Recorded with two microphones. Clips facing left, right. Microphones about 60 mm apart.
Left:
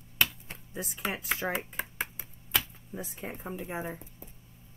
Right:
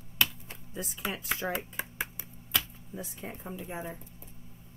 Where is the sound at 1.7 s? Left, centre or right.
Centre.